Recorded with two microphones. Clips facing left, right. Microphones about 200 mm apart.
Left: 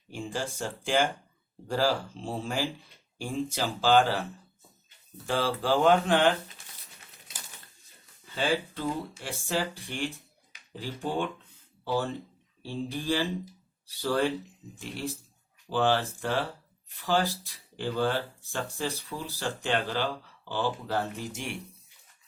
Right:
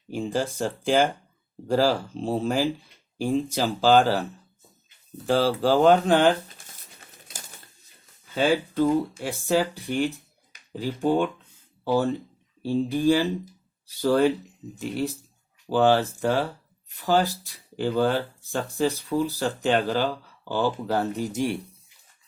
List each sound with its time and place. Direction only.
0.1 s speech: 40° right (ahead or behind)
5.2 s speech: 35° right (ahead or behind)
8.4 s speech: 45° right (ahead or behind)
12.6 s speech: 45° right (ahead or behind)
15.7 s speech: 45° right (ahead or behind)